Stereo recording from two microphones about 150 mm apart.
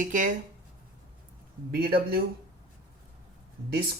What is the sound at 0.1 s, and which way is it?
Speech, 60° right (ahead or behind).